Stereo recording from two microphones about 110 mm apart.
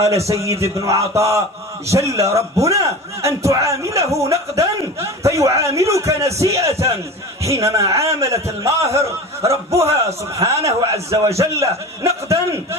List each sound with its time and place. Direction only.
0.3 s a man's voice: 25° right (ahead or behind)